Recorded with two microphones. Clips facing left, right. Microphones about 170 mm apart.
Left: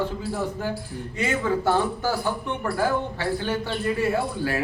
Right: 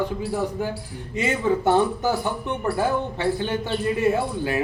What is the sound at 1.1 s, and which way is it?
A man's voice, 20° right (ahead or behind).